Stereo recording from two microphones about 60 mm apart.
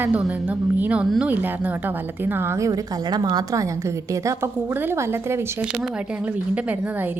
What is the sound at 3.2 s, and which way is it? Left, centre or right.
Speech, right.